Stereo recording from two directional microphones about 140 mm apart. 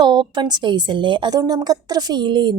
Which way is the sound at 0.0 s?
30° right (ahead or behind).